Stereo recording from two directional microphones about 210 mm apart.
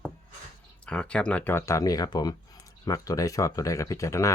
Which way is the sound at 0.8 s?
5° left (ahead or behind).